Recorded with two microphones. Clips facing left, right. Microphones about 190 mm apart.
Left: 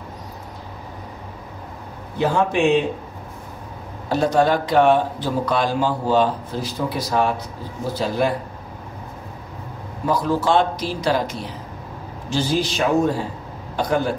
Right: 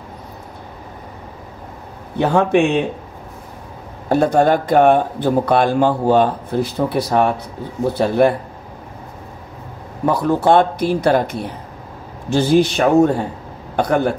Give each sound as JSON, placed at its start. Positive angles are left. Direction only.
{"t": 2.1, "sound": "speech", "side_deg": -60}
{"t": 4.1, "sound": "speech", "side_deg": -55}
{"t": 10.0, "sound": "speech", "side_deg": -60}